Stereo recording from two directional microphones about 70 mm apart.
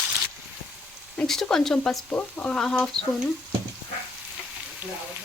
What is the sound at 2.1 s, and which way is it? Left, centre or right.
Speech, left.